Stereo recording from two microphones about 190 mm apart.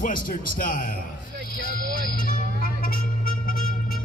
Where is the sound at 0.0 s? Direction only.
45° left (ahead or behind).